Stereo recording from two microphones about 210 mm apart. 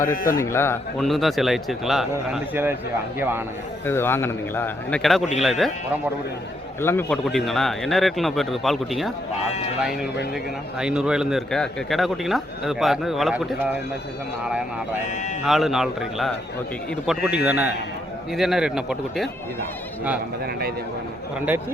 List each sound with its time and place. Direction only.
0.0 s speech: 40° left (ahead or behind)
0.3 s a man's voice: 10° left (ahead or behind)
1.0 s a man's voice: centre (ahead or behind)
3.8 s a man's voice: 10° left (ahead or behind)
6.8 s speech: 5° left (ahead or behind)
10.8 s speech: 5° right (ahead or behind)
15.4 s speech: centre (ahead or behind)